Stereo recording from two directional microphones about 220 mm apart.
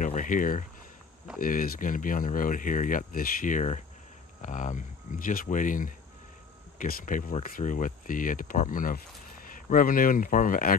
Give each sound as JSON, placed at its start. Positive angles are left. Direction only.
{"t": 0.0, "sound": "speech", "side_deg": 35}